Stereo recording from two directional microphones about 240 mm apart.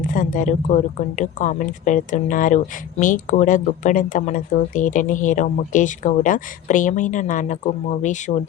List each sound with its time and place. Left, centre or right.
0.0 s speech: left